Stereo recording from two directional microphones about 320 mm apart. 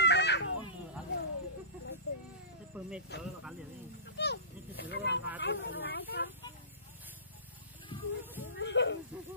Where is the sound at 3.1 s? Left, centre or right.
Left.